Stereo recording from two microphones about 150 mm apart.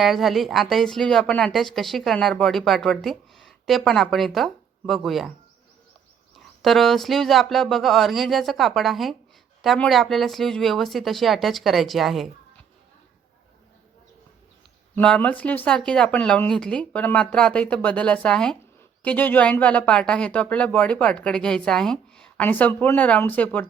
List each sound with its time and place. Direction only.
0.0 s speech: centre (ahead or behind)
6.6 s speech: centre (ahead or behind)
14.9 s speech: 10° left (ahead or behind)